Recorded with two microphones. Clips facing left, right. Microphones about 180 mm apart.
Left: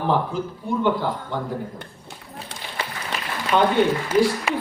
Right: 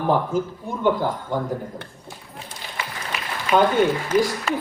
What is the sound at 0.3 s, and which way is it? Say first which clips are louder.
Speech: even; 45° right (ahead or behind).